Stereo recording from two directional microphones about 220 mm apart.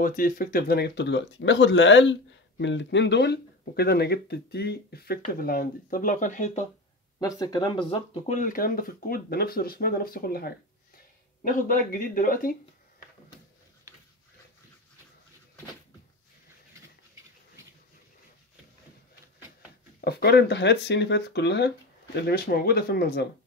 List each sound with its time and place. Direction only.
0.0 s speech: 40° left (ahead or behind)
7.2 s speech: 15° left (ahead or behind); by 12.5 s 40° left (ahead or behind)
20.0 s speech: 45° left (ahead or behind)